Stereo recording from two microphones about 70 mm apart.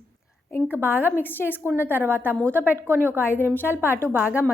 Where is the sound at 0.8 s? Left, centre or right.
Left.